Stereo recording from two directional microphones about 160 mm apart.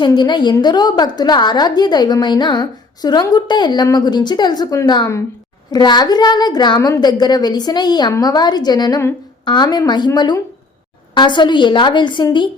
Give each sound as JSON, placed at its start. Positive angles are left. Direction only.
{"t": 0.0, "sound": "a woman's voice", "side_deg": 30}